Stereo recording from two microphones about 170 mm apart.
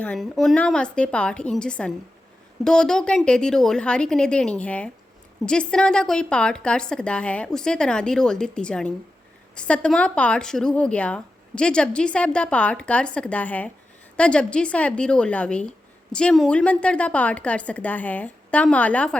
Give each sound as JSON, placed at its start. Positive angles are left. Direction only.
{"t": 0.0, "sound": "a woman's voice", "side_deg": 5}